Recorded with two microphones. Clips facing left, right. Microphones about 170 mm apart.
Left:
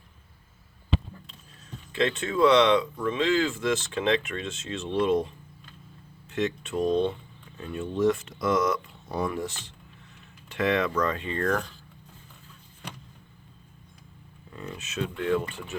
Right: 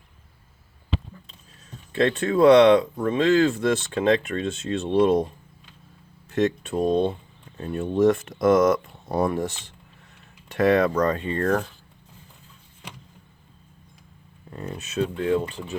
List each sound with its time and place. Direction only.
2.1 s speech: 40° right (ahead or behind)
2.5 s speech: 55° right (ahead or behind)
3.0 s speech: 40° right (ahead or behind)
6.3 s speech: 40° right (ahead or behind)
7.6 s speech: 45° right (ahead or behind)
10.5 s speech: 40° right (ahead or behind)
14.5 s speech: 40° right (ahead or behind)